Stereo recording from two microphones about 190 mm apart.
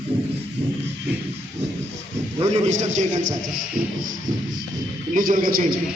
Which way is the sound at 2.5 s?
40° right (ahead or behind).